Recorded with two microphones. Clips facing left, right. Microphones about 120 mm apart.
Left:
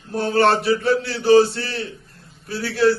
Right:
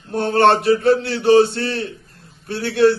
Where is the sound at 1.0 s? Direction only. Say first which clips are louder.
Right 4 dB; 60° right (ahead or behind).